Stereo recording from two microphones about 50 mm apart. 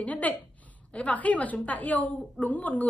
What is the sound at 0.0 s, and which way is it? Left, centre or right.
A woman's voice, left.